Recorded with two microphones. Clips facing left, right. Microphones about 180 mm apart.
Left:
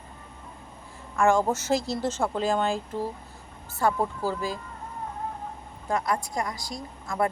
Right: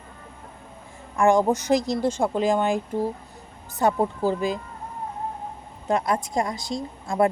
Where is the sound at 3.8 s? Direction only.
20° right (ahead or behind).